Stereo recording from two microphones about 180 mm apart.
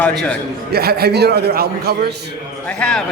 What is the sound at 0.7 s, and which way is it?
A man's voice, 60° right (ahead or behind).